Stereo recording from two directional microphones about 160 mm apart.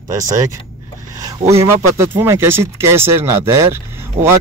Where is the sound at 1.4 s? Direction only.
15° right (ahead or behind).